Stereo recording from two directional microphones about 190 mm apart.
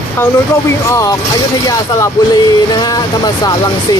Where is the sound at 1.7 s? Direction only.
20° left (ahead or behind).